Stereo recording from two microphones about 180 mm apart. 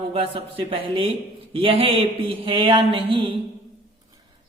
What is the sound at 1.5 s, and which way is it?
Music, 30° right (ahead or behind).